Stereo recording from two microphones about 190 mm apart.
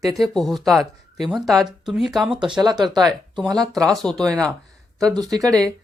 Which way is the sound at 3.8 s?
Centre (ahead or behind).